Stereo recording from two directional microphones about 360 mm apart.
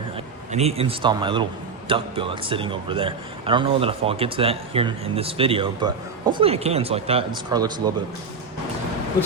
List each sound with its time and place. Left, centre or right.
0.5 s speech: centre